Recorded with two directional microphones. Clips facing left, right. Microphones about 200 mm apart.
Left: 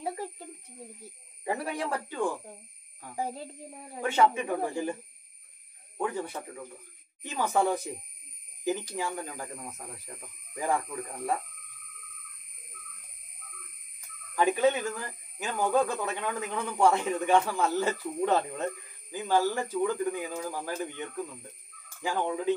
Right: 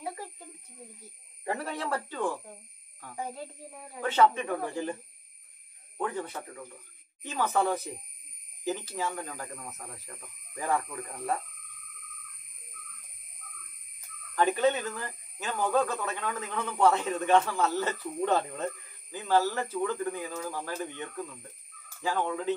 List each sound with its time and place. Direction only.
1.4 s speech: 10° left (ahead or behind)
4.0 s speech: 10° left (ahead or behind)
5.9 s speech: 10° left (ahead or behind)
14.3 s speech: 10° left (ahead or behind)